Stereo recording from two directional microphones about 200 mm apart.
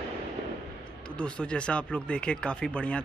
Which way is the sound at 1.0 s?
5° left (ahead or behind).